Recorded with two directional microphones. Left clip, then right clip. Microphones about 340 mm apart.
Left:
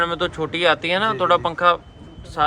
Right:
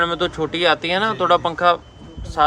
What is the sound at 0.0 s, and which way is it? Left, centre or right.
Speech, centre.